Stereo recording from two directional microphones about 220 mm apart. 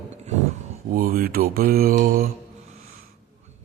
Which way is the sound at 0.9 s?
40° right (ahead or behind).